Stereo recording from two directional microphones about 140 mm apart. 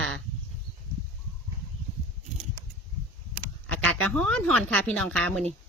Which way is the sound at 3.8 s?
10° left (ahead or behind).